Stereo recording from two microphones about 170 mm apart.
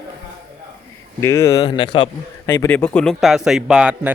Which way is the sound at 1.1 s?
15° left (ahead or behind).